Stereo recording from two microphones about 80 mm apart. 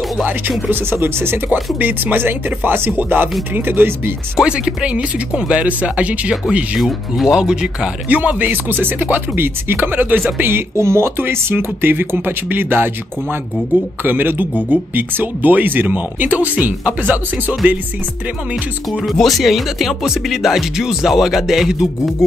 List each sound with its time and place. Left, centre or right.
0.7 s speech: right
4.4 s speech: centre
6.8 s speech: centre
8.2 s speech: right
18.9 s speech: centre